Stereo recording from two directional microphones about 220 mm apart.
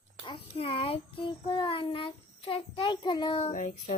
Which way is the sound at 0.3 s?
25° left (ahead or behind).